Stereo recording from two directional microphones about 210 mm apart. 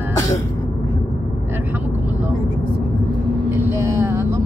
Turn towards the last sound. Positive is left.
turn(degrees=-15)  # may be behind; listen again after turning